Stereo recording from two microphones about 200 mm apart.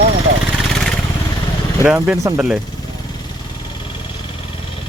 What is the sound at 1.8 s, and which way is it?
Speech, 10° right (ahead or behind).